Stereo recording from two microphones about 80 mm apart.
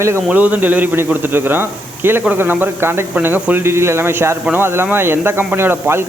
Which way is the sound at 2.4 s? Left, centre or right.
Right.